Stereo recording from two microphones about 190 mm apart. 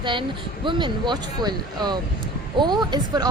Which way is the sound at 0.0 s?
25° right (ahead or behind).